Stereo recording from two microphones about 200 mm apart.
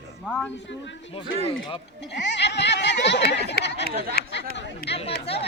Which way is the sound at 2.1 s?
60° left (ahead or behind).